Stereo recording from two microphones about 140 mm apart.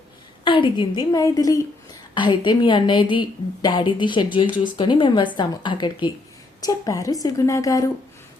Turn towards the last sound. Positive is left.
turn(degrees=25)  # may be behind; listen again after turning